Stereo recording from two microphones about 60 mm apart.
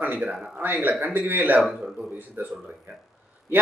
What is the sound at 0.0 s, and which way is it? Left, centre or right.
A man's voice, right.